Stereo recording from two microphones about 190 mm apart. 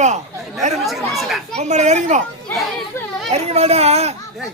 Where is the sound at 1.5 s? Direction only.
40° right (ahead or behind).